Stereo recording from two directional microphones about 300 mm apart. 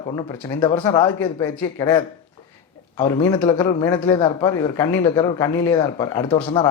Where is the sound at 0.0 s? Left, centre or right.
Centre.